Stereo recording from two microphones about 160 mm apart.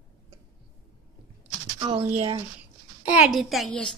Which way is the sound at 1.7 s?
35° right (ahead or behind).